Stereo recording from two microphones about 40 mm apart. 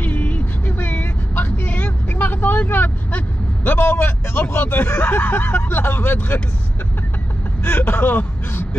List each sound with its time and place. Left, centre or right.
0.0 s vehicle: left
5.7 s speech: left
7.6 s speech: left